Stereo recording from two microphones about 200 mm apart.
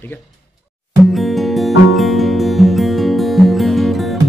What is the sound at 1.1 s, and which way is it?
Music, centre (ahead or behind).